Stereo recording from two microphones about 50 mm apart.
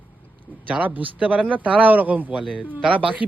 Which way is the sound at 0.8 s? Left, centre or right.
Right.